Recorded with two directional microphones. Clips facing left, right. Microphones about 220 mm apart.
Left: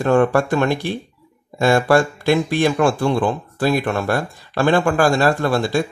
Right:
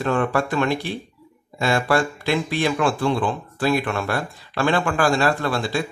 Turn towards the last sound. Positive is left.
turn(degrees=45)  # may be behind; listen again after turning